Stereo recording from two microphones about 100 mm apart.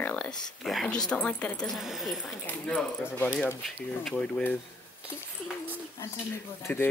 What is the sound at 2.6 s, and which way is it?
Speech, 15° left (ahead or behind).